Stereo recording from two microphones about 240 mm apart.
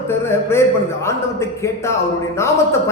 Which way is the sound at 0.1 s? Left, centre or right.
Centre.